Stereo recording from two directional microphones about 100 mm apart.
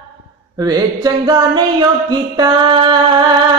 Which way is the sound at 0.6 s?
40° right (ahead or behind).